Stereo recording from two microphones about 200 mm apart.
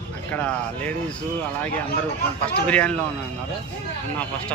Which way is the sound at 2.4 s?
5° left (ahead or behind).